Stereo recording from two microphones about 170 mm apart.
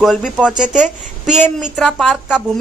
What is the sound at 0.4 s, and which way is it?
Speech, 5° right (ahead or behind).